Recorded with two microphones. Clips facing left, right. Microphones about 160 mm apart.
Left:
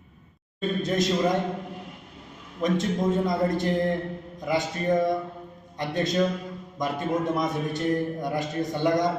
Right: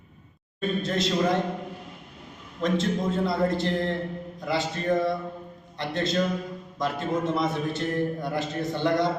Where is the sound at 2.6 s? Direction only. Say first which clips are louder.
Left 1 dB; 15° left (ahead or behind).